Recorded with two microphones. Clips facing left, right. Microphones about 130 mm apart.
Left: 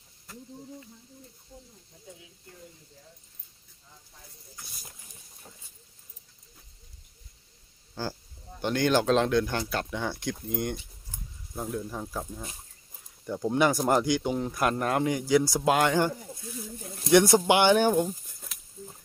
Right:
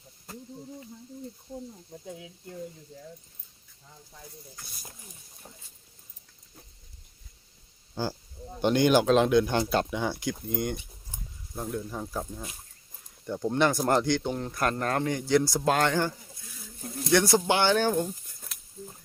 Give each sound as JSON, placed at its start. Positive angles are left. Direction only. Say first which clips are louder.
{"t": 1.9, "sound": "speech", "louder": "right 12 dB", "side_deg": -60}
{"t": 8.0, "sound": "speech", "louder": "right 3 dB", "side_deg": -15}
{"t": 9.6, "sound": "speech", "louder": "right 5 dB", "side_deg": -25}
{"t": 9.9, "sound": "speech", "louder": "right 2 dB", "side_deg": -10}
{"t": 18.3, "sound": "a sound", "louder": "right 1 dB", "side_deg": 0}